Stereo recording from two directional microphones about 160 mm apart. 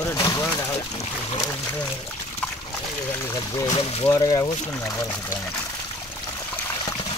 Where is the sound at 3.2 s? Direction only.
20° left (ahead or behind).